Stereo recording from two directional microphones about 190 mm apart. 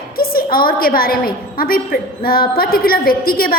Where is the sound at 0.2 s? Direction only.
50° left (ahead or behind).